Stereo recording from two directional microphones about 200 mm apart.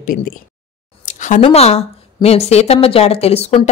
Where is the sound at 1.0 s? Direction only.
40° left (ahead or behind).